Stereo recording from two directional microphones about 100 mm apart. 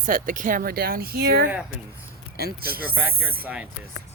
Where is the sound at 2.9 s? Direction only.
20° right (ahead or behind).